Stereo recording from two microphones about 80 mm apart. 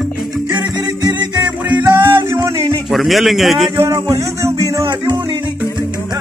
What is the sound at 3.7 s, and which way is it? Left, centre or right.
Music, right.